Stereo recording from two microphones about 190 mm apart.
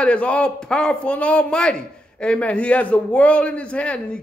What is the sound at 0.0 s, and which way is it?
A man's voice, 5° left (ahead or behind).